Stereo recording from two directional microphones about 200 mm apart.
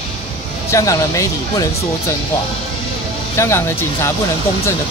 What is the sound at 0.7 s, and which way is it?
Speech, 15° left (ahead or behind).